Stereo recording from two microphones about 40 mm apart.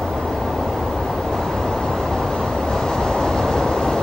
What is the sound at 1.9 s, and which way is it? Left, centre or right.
Vehicle, centre.